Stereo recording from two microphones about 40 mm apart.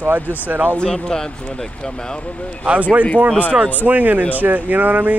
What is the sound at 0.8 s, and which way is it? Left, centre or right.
Speech, centre.